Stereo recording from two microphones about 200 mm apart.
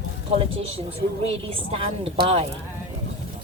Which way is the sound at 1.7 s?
30° right (ahead or behind).